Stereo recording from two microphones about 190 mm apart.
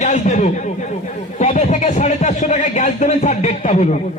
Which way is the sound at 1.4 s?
35° left (ahead or behind).